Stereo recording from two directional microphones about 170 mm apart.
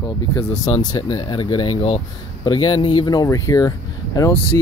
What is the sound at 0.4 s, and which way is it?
Speech, 20° left (ahead or behind).